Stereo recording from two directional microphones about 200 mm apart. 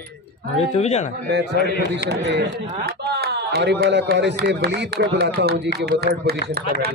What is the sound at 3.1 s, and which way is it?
Speech, 55° right (ahead or behind).